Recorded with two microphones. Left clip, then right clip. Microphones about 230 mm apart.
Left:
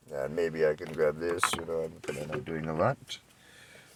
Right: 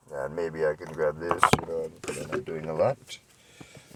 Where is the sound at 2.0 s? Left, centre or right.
Right.